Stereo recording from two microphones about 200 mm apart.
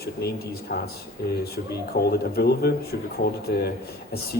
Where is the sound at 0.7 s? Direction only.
45° left (ahead or behind).